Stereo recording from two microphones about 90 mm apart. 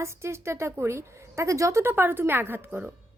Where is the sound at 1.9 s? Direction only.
25° right (ahead or behind).